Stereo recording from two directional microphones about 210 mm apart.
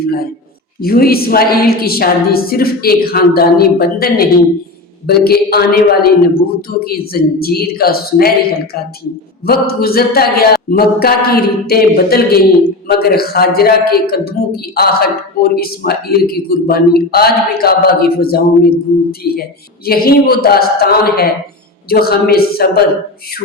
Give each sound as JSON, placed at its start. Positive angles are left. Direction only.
{"t": 0.0, "sound": "speech", "side_deg": 45}